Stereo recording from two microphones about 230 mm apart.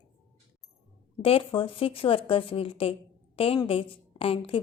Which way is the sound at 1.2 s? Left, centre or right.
Left.